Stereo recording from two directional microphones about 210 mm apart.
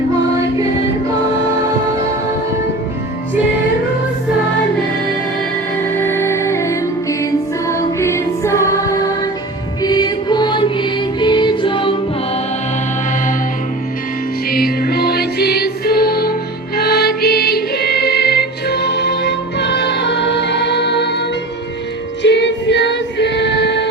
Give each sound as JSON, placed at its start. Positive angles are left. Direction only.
{"t": 6.0, "sound": "music", "side_deg": 10}
{"t": 9.8, "sound": "music", "side_deg": 20}
{"t": 14.5, "sound": "music", "side_deg": 45}